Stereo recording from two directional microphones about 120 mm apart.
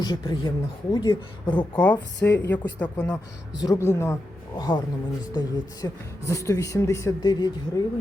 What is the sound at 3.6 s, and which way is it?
Speech, 25° left (ahead or behind).